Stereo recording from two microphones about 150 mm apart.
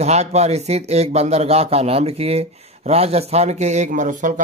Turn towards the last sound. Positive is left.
turn(degrees=-60)  # may be behind; listen again after turning